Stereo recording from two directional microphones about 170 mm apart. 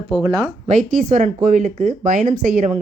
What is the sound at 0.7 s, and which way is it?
Speech, 50° right (ahead or behind).